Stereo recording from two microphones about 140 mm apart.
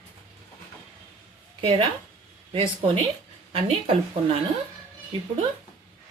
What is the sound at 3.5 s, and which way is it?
Speech, 40° right (ahead or behind).